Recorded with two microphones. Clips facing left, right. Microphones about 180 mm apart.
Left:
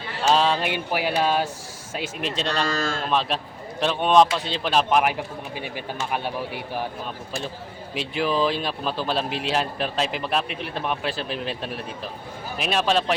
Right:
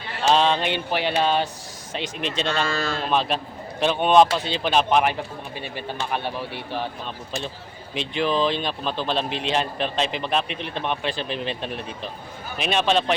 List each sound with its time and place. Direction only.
0.3 s speech: 5° left (ahead or behind)
2.6 s speech: 45° left (ahead or behind)
3.1 s speech: centre (ahead or behind)
7.9 s speech: 5° left (ahead or behind)